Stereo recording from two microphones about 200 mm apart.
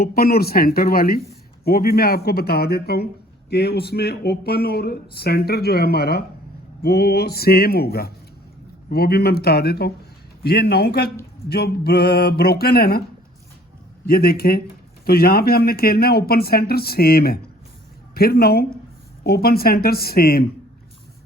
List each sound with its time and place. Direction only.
0.0 s speech: 50° left (ahead or behind)
14.1 s speech: 50° left (ahead or behind)